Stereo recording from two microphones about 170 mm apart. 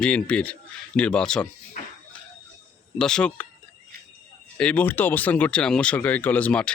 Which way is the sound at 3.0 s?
5° left (ahead or behind).